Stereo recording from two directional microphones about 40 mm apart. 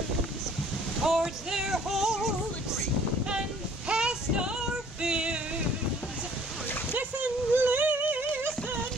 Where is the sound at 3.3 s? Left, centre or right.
Right.